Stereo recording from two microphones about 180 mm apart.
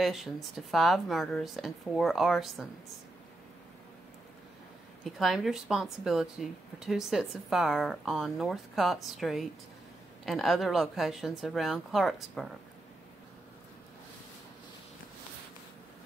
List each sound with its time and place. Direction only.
0.0 s speech: centre (ahead or behind)
5.0 s speech: centre (ahead or behind)